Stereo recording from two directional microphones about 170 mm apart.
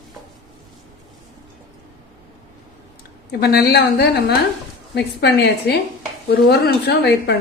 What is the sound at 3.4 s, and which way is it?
Speech, 70° left (ahead or behind).